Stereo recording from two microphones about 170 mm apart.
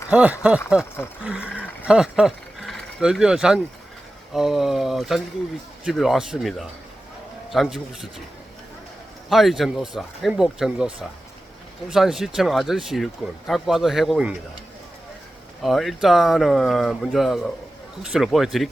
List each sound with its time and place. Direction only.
0.1 s speech: 5° right (ahead or behind)
1.8 s speech: 5° right (ahead or behind)
9.3 s speech: centre (ahead or behind)
15.6 s speech: centre (ahead or behind)